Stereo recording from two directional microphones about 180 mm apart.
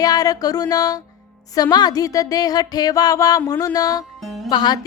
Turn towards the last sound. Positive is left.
turn(degrees=25)  # may be behind; listen again after turning